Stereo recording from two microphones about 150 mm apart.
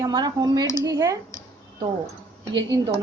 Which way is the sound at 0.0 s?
25° right (ahead or behind).